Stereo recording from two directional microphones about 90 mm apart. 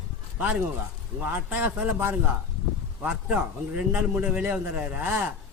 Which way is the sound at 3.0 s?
15° right (ahead or behind).